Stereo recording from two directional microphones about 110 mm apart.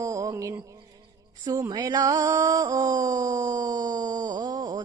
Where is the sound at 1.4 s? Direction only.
35° right (ahead or behind).